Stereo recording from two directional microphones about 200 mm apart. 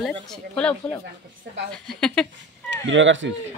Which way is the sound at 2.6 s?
70° right (ahead or behind).